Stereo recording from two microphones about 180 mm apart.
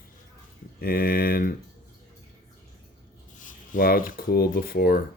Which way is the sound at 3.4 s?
50° left (ahead or behind).